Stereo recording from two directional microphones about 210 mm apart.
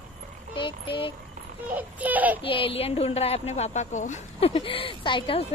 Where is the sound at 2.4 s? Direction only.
25° left (ahead or behind).